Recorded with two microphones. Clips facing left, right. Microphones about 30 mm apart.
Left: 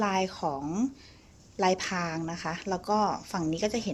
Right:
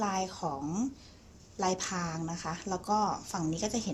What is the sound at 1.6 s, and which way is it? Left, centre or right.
Speech, left.